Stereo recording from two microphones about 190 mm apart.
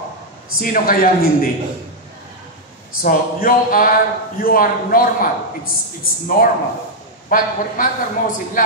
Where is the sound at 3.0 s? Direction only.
45° left (ahead or behind).